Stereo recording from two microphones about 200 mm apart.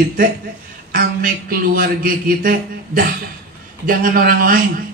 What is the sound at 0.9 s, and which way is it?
A man's voice, 45° right (ahead or behind).